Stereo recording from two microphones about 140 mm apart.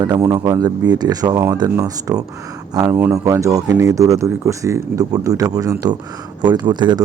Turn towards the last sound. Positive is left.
turn(degrees=-30)  # may be behind; listen again after turning